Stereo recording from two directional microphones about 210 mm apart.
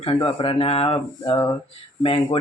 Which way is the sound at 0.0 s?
25° left (ahead or behind).